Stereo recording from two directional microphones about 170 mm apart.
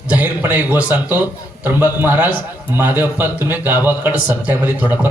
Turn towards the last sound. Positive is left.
turn(degrees=-10)  # may be behind; listen again after turning